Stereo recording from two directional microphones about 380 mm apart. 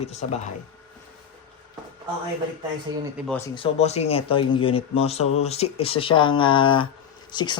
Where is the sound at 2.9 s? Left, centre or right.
Centre.